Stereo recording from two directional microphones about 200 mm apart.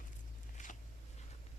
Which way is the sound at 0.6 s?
35° left (ahead or behind).